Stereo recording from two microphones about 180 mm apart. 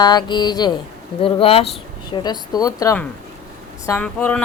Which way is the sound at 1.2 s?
30° left (ahead or behind).